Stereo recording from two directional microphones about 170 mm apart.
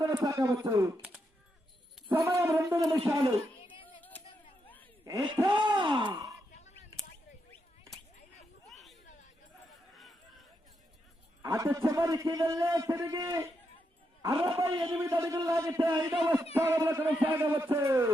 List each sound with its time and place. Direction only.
0.0 s speech: 20° right (ahead or behind)
2.1 s a man's voice: 15° right (ahead or behind)
3.8 s a sound: 10° left (ahead or behind)
5.0 s speech: 20° right (ahead or behind)
8.7 s a sound: centre (ahead or behind)
11.4 s a man's voice: 20° right (ahead or behind)
14.9 s a man's voice: 15° right (ahead or behind)